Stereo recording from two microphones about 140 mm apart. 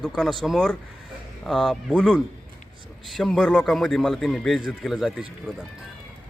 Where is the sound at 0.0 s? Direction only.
Centre (ahead or behind).